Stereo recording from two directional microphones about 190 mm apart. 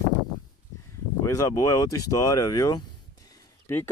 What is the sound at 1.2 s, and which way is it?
A man's voice, 20° left (ahead or behind).